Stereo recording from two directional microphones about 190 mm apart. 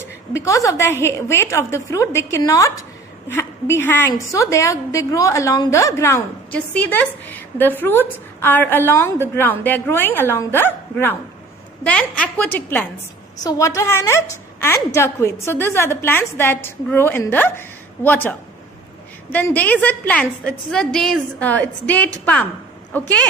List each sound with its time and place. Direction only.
0.0 s a woman's voice: 15° left (ahead or behind)